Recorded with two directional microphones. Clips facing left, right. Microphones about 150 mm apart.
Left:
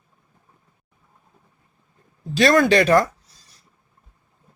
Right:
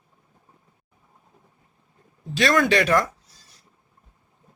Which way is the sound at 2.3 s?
35° left (ahead or behind).